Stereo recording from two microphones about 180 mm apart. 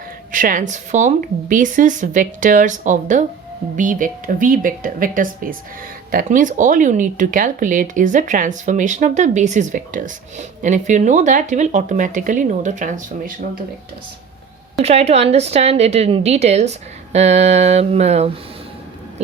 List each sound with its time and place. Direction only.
0.3 s speech: 50° right (ahead or behind)
14.8 s a woman's voice: 35° right (ahead or behind)